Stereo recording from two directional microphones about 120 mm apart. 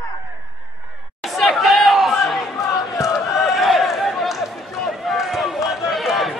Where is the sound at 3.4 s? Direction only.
Centre (ahead or behind).